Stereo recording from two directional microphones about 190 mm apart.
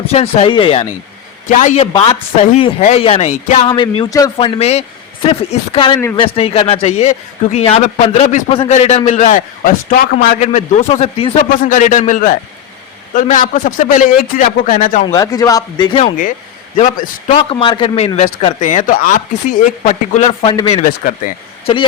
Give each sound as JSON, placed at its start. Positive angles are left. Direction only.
{"t": 0.1, "sound": "a man's voice", "side_deg": 35}
{"t": 1.5, "sound": "a man's voice", "side_deg": 40}
{"t": 1.9, "sound": "speech", "side_deg": 25}
{"t": 2.5, "sound": "a man's voice", "side_deg": 35}
{"t": 11.5, "sound": "a man's voice", "side_deg": 45}
{"t": 15.0, "sound": "speech", "side_deg": 20}
{"t": 16.7, "sound": "a man's voice", "side_deg": 40}
{"t": 17.5, "sound": "a man's voice", "side_deg": 25}